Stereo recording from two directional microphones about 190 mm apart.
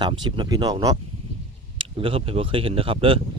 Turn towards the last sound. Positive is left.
turn(degrees=-30)  # may be behind; listen again after turning